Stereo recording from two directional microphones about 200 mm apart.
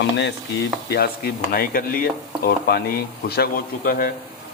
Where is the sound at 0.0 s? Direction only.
60° left (ahead or behind).